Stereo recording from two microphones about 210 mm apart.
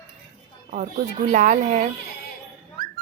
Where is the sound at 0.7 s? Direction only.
35° right (ahead or behind).